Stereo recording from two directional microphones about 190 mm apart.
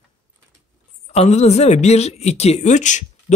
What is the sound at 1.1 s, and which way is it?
Speech, 35° left (ahead or behind).